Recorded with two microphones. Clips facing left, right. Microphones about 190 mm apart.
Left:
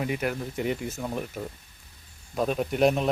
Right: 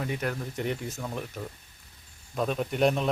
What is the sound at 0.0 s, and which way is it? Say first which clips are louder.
Speech: left 3 dB; 5° left (ahead or behind).